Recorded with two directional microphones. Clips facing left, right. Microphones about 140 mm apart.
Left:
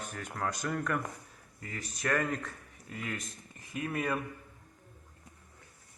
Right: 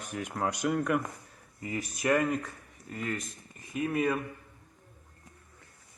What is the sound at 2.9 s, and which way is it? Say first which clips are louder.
Speech: right 4 dB; centre (ahead or behind).